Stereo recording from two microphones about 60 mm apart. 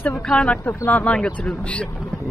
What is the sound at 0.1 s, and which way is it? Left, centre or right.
Speech, centre.